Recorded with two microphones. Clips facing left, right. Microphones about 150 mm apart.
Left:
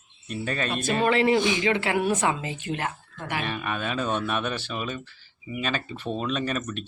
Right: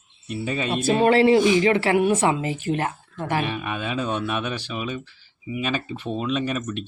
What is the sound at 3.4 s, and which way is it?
Speech, 5° right (ahead or behind).